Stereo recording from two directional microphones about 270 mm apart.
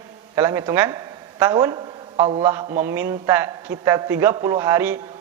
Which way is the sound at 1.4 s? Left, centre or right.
Centre.